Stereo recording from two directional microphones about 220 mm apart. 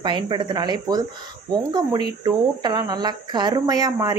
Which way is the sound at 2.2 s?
20° right (ahead or behind).